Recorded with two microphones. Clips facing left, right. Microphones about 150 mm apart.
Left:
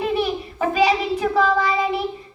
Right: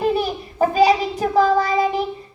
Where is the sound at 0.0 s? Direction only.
40° right (ahead or behind).